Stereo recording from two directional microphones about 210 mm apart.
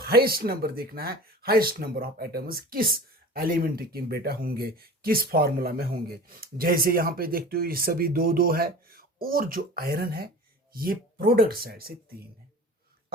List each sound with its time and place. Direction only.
0.0 s speech: 45° right (ahead or behind)